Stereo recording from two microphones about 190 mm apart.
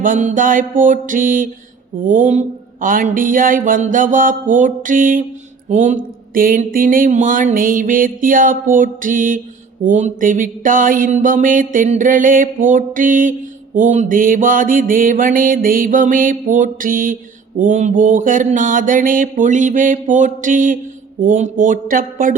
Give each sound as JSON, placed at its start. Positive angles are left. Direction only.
{"t": 0.0, "sound": "speech", "side_deg": -40}